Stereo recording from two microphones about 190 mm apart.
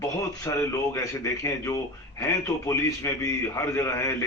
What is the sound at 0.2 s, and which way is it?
A man's voice, 15° left (ahead or behind).